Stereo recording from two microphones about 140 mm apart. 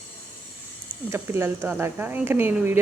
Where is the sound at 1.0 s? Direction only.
20° right (ahead or behind).